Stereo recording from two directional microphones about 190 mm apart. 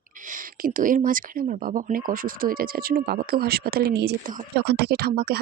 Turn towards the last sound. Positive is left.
turn(degrees=-55)  # may be behind; listen again after turning